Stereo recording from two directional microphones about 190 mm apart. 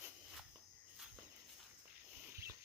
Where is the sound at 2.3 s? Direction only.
15° right (ahead or behind).